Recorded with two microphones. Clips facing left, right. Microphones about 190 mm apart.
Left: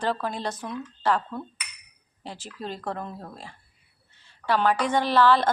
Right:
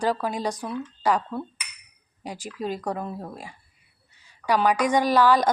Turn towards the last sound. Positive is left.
turn(degrees=-10)  # may be behind; listen again after turning